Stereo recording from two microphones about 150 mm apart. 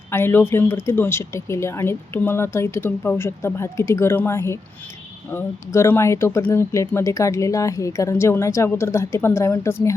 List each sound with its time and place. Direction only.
0.1 s speech: 15° left (ahead or behind)